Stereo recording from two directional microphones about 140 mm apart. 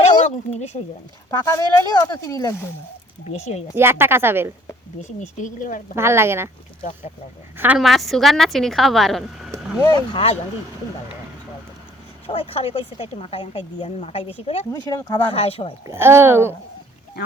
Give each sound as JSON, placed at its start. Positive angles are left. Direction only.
{"t": 0.3, "sound": "speech", "side_deg": 50}
{"t": 1.3, "sound": "speech", "side_deg": 25}
{"t": 3.2, "sound": "speech", "side_deg": 50}
{"t": 3.8, "sound": "a woman's voice", "side_deg": -15}
{"t": 5.0, "sound": "speech", "side_deg": 60}
{"t": 6.0, "sound": "a woman's voice", "side_deg": -20}
{"t": 7.5, "sound": "a woman's voice", "side_deg": -15}
{"t": 7.8, "sound": "a woman's voice", "side_deg": 0}
{"t": 9.6, "sound": "a sound", "side_deg": -5}
{"t": 10.1, "sound": "speech", "side_deg": 40}
{"t": 12.3, "sound": "speech", "side_deg": 40}
{"t": 14.8, "sound": "speech", "side_deg": 25}
{"t": 15.3, "sound": "speech", "side_deg": 45}
{"t": 15.9, "sound": "a woman's voice", "side_deg": -15}